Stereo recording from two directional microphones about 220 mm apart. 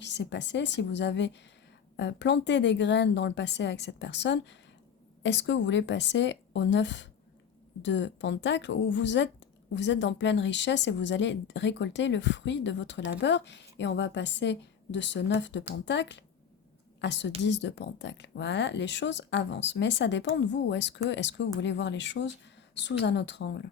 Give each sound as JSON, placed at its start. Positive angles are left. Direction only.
{"t": 0.0, "sound": "a woman's voice", "side_deg": 55}